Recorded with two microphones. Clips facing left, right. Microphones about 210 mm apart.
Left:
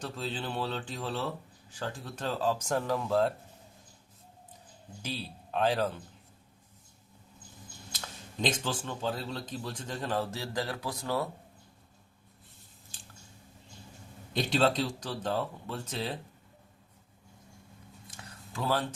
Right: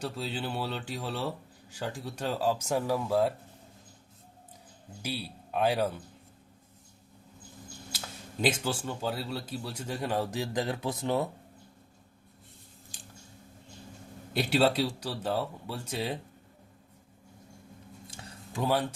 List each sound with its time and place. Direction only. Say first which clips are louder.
0.0 s speech: right 2 dB; 10° right (ahead or behind)
5.0 s speech: right 2 dB; 10° right (ahead or behind)
7.9 s speech: right 1 dB; 10° right (ahead or behind)
14.3 s speech: right 2 dB; 5° right (ahead or behind)
18.1 s a sound: right 3 dB; 20° right (ahead or behind)